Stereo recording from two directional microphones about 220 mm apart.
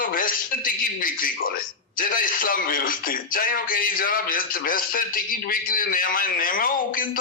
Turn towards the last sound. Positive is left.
turn(degrees=40)  # may be behind; listen again after turning